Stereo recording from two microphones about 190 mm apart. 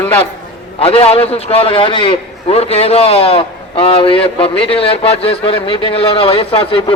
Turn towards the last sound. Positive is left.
turn(degrees=30)  # may be behind; listen again after turning